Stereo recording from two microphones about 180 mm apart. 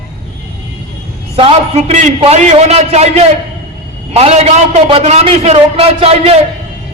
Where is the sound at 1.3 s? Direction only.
35° right (ahead or behind).